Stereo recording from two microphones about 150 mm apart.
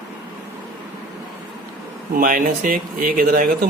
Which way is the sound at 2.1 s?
65° right (ahead or behind).